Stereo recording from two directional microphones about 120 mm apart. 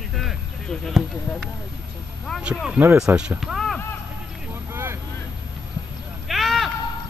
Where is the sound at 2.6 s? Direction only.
15° right (ahead or behind).